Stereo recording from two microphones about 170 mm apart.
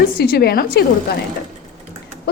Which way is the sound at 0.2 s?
65° left (ahead or behind).